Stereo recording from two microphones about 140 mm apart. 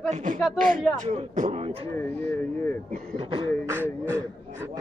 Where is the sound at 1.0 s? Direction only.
55° right (ahead or behind).